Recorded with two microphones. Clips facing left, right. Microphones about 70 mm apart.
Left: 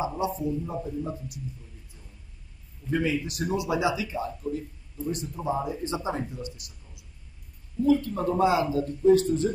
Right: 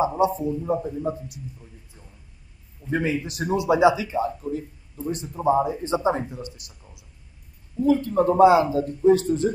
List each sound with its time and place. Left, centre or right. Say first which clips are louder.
0.0 s a man's voice: right 7 dB; right
2.9 s a man's voice: right 2 dB; right